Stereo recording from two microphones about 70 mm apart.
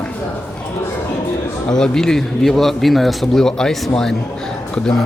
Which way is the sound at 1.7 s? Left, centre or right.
Centre.